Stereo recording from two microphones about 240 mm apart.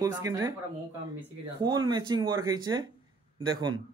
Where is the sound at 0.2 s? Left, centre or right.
Centre.